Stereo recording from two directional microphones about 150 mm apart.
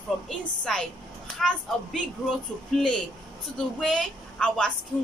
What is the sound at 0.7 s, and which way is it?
A woman's voice, 5° left (ahead or behind).